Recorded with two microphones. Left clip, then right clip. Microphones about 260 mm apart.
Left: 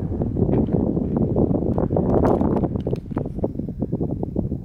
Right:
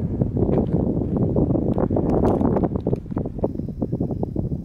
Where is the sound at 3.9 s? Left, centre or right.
Right.